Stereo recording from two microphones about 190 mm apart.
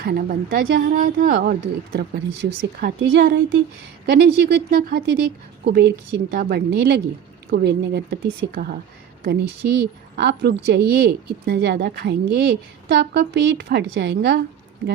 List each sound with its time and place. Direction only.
0.0 s speech: 55° right (ahead or behind)